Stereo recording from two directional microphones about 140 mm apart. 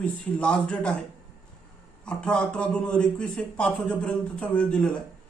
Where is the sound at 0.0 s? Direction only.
5° left (ahead or behind).